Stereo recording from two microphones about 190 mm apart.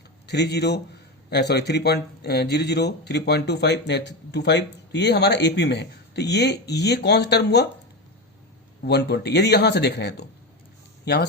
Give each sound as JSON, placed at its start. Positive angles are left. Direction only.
{"t": 0.3, "sound": "speech", "side_deg": 60}
{"t": 8.8, "sound": "speech", "side_deg": 60}